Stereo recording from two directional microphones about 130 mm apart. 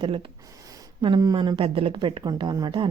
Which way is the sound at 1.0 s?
35° right (ahead or behind).